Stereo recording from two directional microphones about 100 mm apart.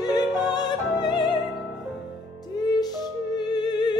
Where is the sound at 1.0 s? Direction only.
50° left (ahead or behind).